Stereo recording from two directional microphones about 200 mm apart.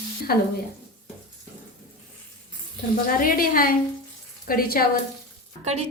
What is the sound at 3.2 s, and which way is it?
A woman's voice, 45° left (ahead or behind).